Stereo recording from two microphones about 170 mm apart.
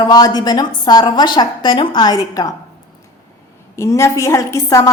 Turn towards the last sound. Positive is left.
turn(degrees=20)  # may be behind; listen again after turning